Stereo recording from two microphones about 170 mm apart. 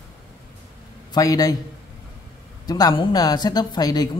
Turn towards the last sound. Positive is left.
turn(degrees=20)  # may be behind; listen again after turning